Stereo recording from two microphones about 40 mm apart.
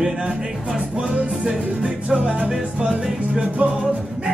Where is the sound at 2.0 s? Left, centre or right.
Right.